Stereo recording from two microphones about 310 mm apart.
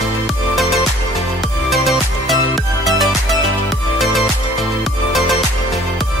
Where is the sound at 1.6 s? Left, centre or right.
Centre.